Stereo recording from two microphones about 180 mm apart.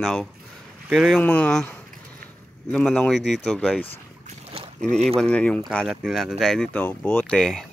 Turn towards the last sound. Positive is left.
turn(degrees=0)  # may be behind; listen again after turning